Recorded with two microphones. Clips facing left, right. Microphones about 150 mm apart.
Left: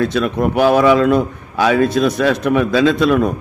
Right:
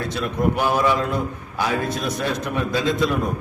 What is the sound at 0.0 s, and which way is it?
A man's voice, 85° left.